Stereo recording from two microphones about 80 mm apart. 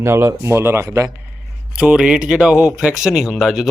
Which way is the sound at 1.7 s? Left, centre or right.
Centre.